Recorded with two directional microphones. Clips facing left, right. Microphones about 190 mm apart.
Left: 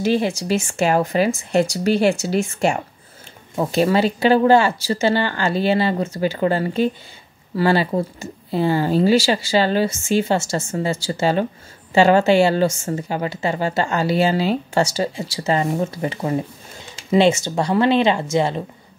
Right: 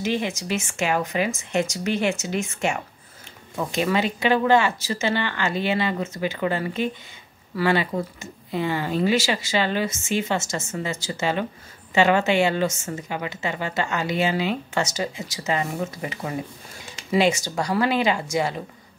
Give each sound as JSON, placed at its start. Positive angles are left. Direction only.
{"t": 0.0, "sound": "a woman's voice", "side_deg": 35}